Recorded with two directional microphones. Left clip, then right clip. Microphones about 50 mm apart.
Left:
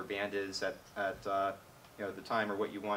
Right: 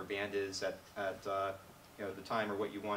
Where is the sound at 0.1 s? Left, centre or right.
Centre.